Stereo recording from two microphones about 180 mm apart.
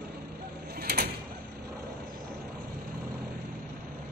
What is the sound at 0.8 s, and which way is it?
Sliding door, 60° right (ahead or behind).